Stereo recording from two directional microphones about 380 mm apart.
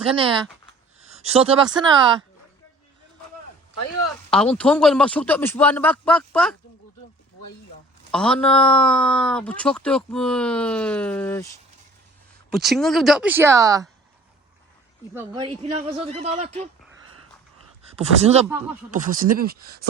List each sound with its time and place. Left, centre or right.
0.1 s speech: centre
4.3 s speech: centre
8.1 s speech: centre
12.5 s speech: centre
15.1 s speech: centre
17.9 s speech: centre